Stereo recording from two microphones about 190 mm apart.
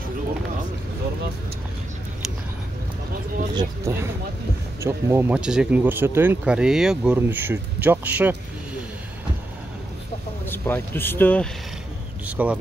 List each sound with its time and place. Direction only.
3.5 s speech: 15° right (ahead or behind)
10.4 s speech: 10° left (ahead or behind)
12.3 s speech: 10° right (ahead or behind)